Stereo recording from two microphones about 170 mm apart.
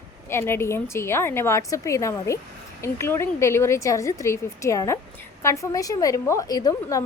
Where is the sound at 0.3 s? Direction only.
15° left (ahead or behind).